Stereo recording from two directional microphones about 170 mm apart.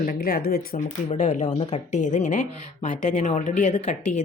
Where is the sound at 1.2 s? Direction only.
45° left (ahead or behind).